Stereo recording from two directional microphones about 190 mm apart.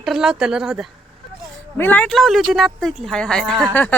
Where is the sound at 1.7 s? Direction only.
10° left (ahead or behind).